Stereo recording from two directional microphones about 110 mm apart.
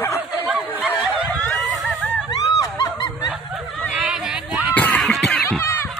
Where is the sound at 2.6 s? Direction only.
35° left (ahead or behind).